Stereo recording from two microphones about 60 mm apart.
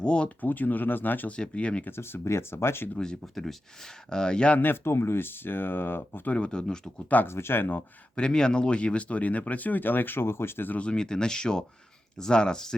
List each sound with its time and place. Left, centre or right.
0.0 s speech: centre
0.4 s speech: left
1.4 s speech: centre
1.9 s speech: left
3.0 s speech: centre
4.5 s speech: left
6.3 s speech: centre
7.3 s speech: left
8.1 s speech: centre; by 10.8 s left
10.8 s speech: centre